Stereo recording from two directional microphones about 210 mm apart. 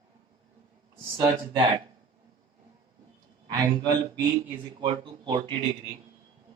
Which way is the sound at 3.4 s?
15° right (ahead or behind).